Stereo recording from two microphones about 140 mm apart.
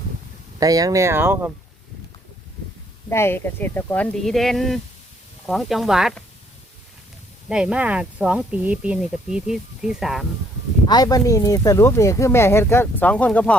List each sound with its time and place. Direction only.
0.6 s speech: 25° right (ahead or behind)
3.1 s speech: 15° left (ahead or behind); by 6.1 s 5° right (ahead or behind)
7.4 s speech: 5° right (ahead or behind)
10.8 s speech: 30° left (ahead or behind); by 13.6 s 10° left (ahead or behind)